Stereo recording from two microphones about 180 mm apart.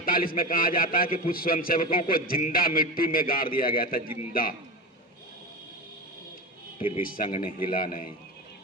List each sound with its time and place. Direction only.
0.0 s a man's voice: 55° left (ahead or behind)
7.0 s a man's voice: 50° left (ahead or behind)